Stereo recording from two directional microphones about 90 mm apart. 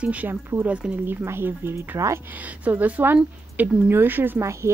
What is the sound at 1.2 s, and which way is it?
Speech, 25° right (ahead or behind).